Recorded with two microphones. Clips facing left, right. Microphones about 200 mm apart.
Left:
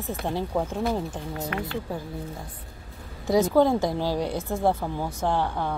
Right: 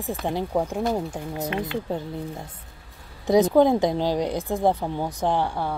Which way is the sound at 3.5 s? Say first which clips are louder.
Right 3 dB; 15° right (ahead or behind).